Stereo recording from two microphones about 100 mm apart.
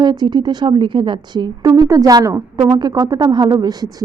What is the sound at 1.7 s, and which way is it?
A woman's voice, 35° right (ahead or behind).